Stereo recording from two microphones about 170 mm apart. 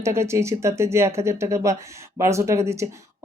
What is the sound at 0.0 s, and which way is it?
Speech, 15° right (ahead or behind).